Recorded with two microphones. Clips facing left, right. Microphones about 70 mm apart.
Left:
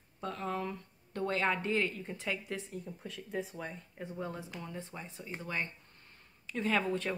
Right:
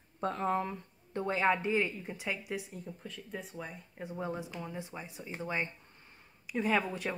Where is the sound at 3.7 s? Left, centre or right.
Centre.